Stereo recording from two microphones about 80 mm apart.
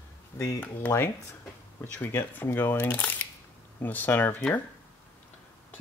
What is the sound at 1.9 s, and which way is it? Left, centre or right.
Speech, left.